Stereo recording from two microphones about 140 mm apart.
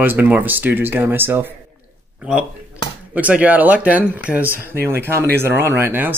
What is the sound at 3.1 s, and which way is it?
Speech, 10° right (ahead or behind).